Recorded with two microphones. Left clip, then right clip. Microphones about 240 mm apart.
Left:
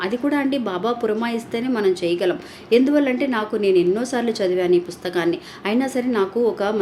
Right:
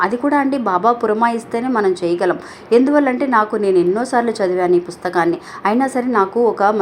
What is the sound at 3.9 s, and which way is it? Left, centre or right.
Speech, centre.